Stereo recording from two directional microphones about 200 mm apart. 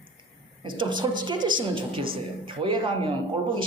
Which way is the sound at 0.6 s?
25° right (ahead or behind).